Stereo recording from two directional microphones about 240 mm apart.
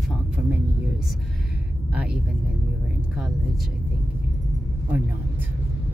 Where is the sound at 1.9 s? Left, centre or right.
Centre.